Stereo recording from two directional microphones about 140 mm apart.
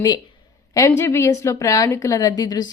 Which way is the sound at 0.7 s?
20° left (ahead or behind).